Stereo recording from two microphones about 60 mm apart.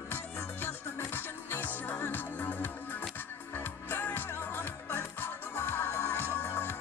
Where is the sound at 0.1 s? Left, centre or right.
Left.